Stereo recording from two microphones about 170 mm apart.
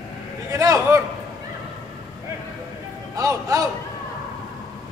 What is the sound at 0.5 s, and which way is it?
Speech, 20° right (ahead or behind).